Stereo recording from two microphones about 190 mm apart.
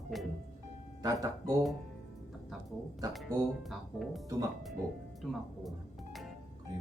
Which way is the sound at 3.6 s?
Centre (ahead or behind).